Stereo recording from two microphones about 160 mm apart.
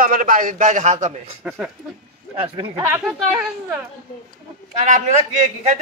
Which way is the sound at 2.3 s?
35° right (ahead or behind).